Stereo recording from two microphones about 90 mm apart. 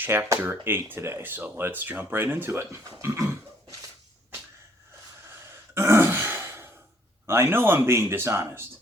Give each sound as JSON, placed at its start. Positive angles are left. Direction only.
{"t": 0.0, "sound": "speech", "side_deg": -25}
{"t": 5.7, "sound": "throat clearing", "side_deg": -25}
{"t": 7.3, "sound": "speech", "side_deg": -25}